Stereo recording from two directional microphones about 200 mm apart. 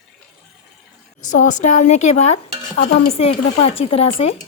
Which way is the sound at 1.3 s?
40° left (ahead or behind).